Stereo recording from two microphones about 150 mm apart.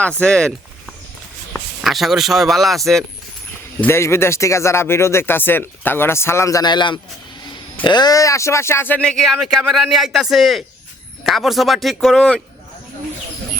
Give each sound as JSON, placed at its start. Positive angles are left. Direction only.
{"t": 0.0, "sound": "speech", "side_deg": 5}
{"t": 1.5, "sound": "a man's voice", "side_deg": 0}
{"t": 3.8, "sound": "speech", "side_deg": 15}